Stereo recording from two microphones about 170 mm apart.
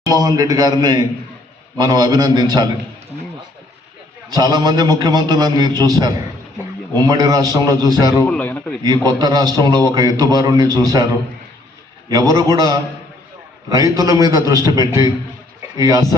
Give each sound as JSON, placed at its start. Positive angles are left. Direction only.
{"t": 0.0, "sound": "a man's voice", "side_deg": -20}
{"t": 4.3, "sound": "a man's voice", "side_deg": -25}
{"t": 8.3, "sound": "a man's voice", "side_deg": 10}
{"t": 8.8, "sound": "a man's voice", "side_deg": -25}